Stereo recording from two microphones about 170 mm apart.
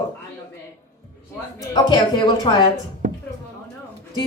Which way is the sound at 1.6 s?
25° left (ahead or behind).